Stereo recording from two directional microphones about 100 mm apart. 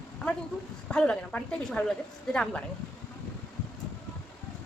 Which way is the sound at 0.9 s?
10° left (ahead or behind).